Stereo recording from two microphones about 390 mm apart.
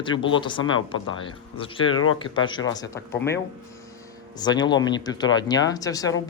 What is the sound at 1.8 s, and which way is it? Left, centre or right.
Speech, left.